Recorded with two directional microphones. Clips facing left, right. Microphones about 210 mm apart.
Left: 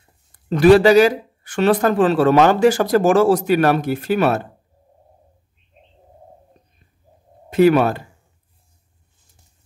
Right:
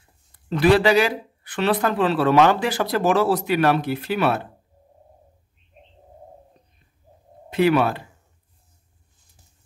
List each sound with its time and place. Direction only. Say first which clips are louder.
0.5 s speech: left 6 dB; 45° left (ahead or behind)
7.4 s speech: left 5 dB; 45° left (ahead or behind)